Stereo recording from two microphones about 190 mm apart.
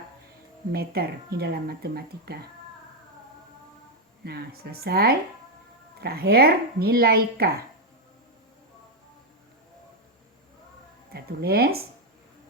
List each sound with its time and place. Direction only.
0.7 s speech: 55° right (ahead or behind)
4.2 s speech: 60° right (ahead or behind)
11.1 s speech: 55° right (ahead or behind)